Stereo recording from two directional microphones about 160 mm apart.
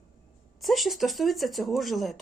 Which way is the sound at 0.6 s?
Centre (ahead or behind).